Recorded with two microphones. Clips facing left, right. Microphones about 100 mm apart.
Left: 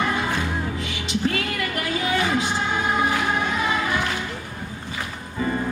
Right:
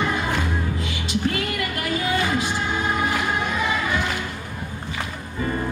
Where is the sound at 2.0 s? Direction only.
20° left (ahead or behind).